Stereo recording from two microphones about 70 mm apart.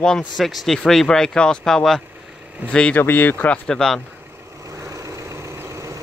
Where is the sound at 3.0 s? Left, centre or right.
Left.